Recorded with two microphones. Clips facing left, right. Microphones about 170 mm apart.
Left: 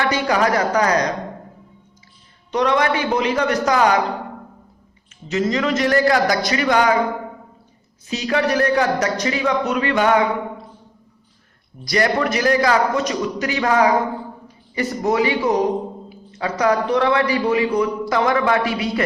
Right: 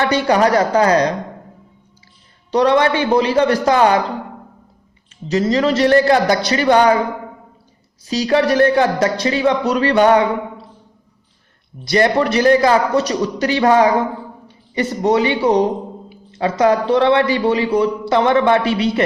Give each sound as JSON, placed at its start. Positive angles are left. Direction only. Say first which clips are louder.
{"t": 0.1, "sound": "a man's voice", "louder": "right 4 dB", "side_deg": -30}
{"t": 2.5, "sound": "a man's voice", "louder": "right 4 dB", "side_deg": -35}
{"t": 5.3, "sound": "a man's voice", "louder": "right 4 dB", "side_deg": -35}
{"t": 8.0, "sound": "a man's voice", "louder": "right 5 dB", "side_deg": -35}
{"t": 11.9, "sound": "a man's voice", "louder": "right 4 dB", "side_deg": -30}